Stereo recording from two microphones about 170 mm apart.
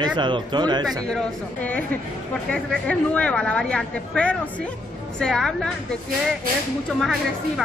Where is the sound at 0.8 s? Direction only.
5° left (ahead or behind).